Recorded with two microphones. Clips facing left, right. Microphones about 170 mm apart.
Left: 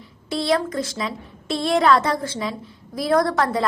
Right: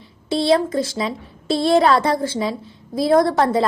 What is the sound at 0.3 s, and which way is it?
A woman's voice, 25° right (ahead or behind).